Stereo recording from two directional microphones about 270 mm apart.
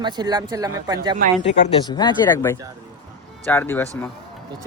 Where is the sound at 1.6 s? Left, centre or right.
Centre.